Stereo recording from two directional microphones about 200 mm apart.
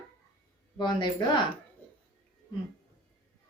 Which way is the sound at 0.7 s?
20° left (ahead or behind).